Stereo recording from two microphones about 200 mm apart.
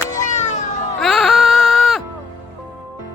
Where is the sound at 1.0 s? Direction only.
Centre (ahead or behind).